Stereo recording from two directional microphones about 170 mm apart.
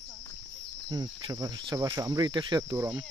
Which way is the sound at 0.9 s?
25° right (ahead or behind).